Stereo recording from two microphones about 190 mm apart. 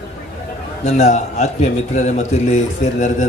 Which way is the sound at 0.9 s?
35° left (ahead or behind).